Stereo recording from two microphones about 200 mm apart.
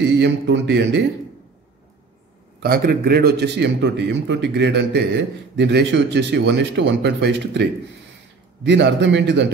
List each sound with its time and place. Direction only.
0.0 s a man's voice: 60° right (ahead or behind)
2.6 s a man's voice: 50° right (ahead or behind)
8.6 s a man's voice: 60° right (ahead or behind)